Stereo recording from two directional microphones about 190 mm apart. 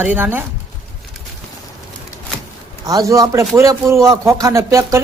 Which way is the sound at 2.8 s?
20° right (ahead or behind).